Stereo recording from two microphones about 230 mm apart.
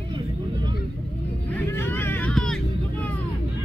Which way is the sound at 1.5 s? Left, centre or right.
Centre.